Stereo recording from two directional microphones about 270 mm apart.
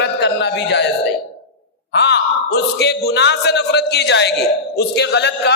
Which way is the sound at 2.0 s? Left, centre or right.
Left.